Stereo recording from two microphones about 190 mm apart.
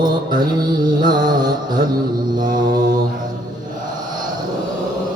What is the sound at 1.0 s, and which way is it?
Mantra, 20° right (ahead or behind).